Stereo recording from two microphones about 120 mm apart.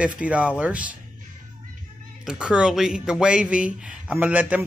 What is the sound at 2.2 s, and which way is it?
A man's voice, 5° right (ahead or behind).